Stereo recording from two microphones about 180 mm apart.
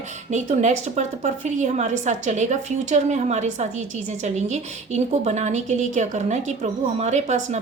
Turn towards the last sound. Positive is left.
turn(degrees=-40)  # may be behind; listen again after turning